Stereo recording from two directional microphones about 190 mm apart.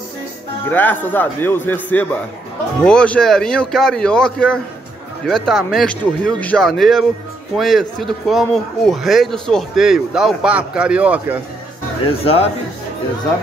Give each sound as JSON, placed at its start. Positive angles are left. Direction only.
{"t": 0.7, "sound": "a man's voice", "side_deg": 10}
{"t": 12.1, "sound": "speech", "side_deg": 30}